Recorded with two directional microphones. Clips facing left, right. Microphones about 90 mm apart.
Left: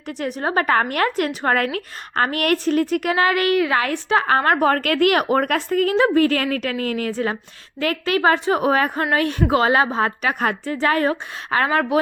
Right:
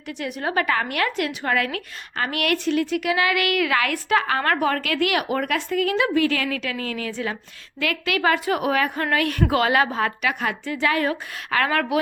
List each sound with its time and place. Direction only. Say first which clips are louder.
0.2 s a woman's voice: left 3 dB; 35° left (ahead or behind)
4.7 s a woman's voice: left 5 dB; 45° left (ahead or behind); by 11.9 s 30° left (ahead or behind)